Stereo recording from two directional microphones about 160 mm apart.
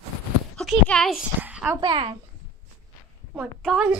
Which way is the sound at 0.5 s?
5° left (ahead or behind).